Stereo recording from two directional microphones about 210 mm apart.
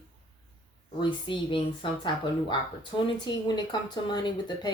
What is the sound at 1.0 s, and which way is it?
Speech, 25° left (ahead or behind).